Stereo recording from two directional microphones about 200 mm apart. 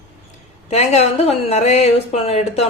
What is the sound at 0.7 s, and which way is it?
Speech, 30° left (ahead or behind).